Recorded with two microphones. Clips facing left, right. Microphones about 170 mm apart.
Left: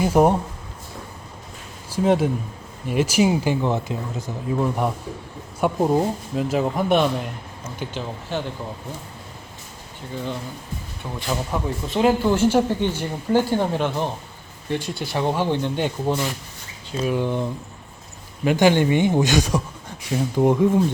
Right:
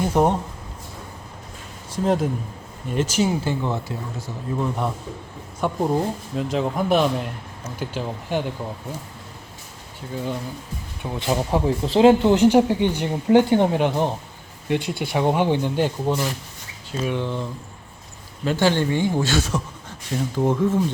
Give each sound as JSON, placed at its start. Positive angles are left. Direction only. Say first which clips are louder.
{"t": 0.0, "sound": "speech", "louder": "left 2 dB", "side_deg": 10}
{"t": 2.0, "sound": "speech", "louder": "left 2 dB", "side_deg": 5}
{"t": 7.8, "sound": "speech", "louder": "right 2 dB", "side_deg": -10}
{"t": 11.0, "sound": "speech", "louder": "right 4 dB", "side_deg": -20}
{"t": 17.1, "sound": "speech", "louder": "left 4 dB", "side_deg": 10}